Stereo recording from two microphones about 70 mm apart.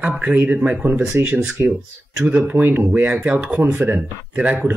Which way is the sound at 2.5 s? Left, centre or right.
Right.